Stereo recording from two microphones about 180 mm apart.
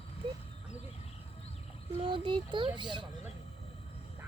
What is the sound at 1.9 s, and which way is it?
Speech, 25° right (ahead or behind).